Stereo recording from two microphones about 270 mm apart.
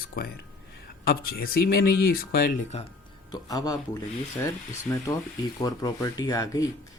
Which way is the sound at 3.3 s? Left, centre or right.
Centre.